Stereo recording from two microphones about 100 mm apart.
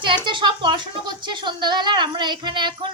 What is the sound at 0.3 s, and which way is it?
A woman's voice, 55° right (ahead or behind).